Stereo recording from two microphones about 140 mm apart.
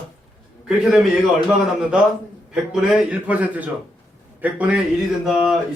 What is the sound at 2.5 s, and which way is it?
A man's voice, 5° right (ahead or behind).